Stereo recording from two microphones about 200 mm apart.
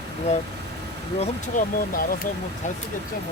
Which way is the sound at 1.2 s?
45° left (ahead or behind).